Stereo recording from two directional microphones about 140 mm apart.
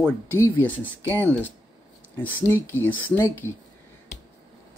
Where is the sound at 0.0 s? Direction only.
15° left (ahead or behind).